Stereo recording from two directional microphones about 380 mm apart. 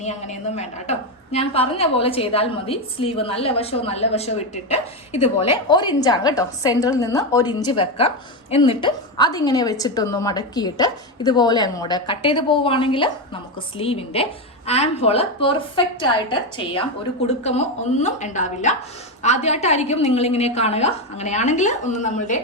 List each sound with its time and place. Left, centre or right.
0.0 s a woman's voice: centre